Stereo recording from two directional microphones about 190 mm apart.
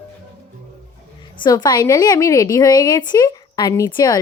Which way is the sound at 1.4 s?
20° left (ahead or behind).